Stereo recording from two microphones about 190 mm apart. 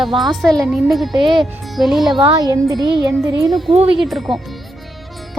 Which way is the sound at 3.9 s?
Centre (ahead or behind).